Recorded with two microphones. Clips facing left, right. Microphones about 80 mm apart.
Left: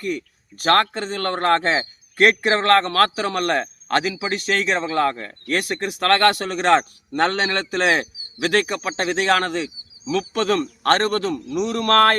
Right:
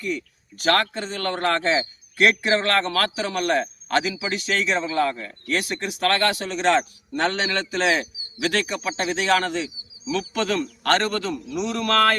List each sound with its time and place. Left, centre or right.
0.0 s speech: left